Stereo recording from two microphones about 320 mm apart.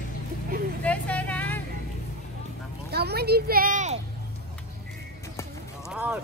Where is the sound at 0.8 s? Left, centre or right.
Centre.